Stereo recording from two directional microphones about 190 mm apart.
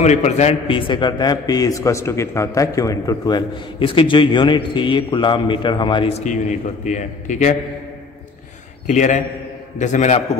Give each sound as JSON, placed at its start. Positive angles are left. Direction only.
{"t": 0.0, "sound": "a man's voice", "side_deg": 35}
{"t": 6.2, "sound": "a man's voice", "side_deg": 40}
{"t": 8.8, "sound": "a man's voice", "side_deg": 40}